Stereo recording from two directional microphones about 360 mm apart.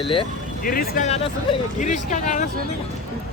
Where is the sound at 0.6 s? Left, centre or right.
Left.